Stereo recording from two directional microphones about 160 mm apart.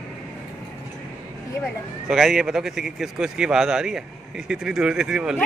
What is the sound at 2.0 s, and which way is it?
A man's voice, 5° right (ahead or behind).